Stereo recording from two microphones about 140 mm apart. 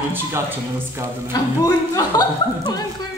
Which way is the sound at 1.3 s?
25° left (ahead or behind).